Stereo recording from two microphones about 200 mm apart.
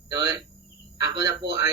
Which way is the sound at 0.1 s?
20° right (ahead or behind).